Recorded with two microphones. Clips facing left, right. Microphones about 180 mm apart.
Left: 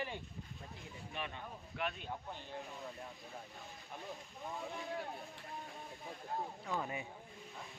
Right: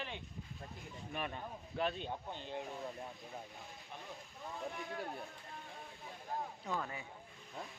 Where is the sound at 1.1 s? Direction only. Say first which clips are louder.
Right 3 dB; 45° right (ahead or behind); by 2.1 s 30° right (ahead or behind).